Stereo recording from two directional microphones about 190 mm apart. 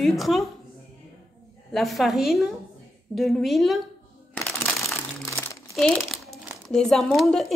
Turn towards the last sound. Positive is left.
turn(degrees=0)  # may be behind; listen again after turning